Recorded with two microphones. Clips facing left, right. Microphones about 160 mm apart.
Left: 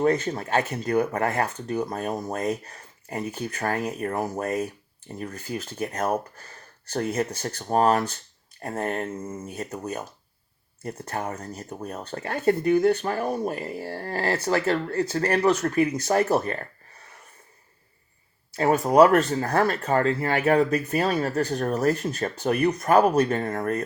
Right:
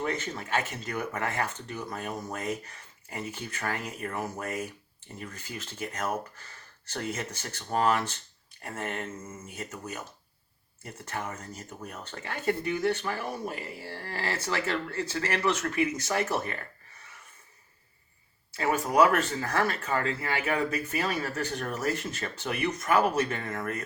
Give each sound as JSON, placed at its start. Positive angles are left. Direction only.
{"t": 0.0, "sound": "speech", "side_deg": 35}
{"t": 18.5, "sound": "speech", "side_deg": 40}